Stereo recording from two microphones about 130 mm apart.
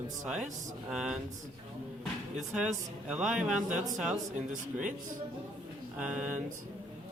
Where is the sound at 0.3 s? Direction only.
5° right (ahead or behind).